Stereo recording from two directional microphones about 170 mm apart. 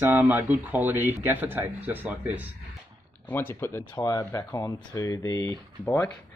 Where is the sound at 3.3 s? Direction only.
10° left (ahead or behind).